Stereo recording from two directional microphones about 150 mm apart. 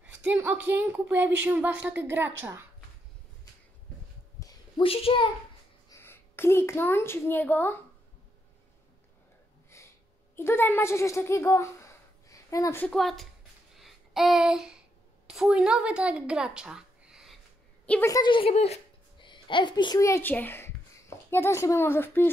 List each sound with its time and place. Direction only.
0.0 s a woman's voice: 10° right (ahead or behind)
4.4 s a sound: 25° left (ahead or behind)
4.8 s a child's voice: 40° left (ahead or behind)
5.9 s a woman's voice: 15° left (ahead or behind)
9.7 s a sound: 20° left (ahead or behind)
10.3 s a woman's voice: 15° left (ahead or behind)
12.8 s speech: centre (ahead or behind)
13.7 s a sound: centre (ahead or behind)
15.2 s a woman's voice: 5° right (ahead or behind)
18.0 s a woman's voice: 20° left (ahead or behind)
18.3 s a child's voice: 40° left (ahead or behind); by 22.3 s 15° left (ahead or behind)